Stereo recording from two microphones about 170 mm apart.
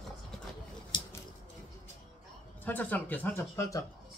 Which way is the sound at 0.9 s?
30° left (ahead or behind).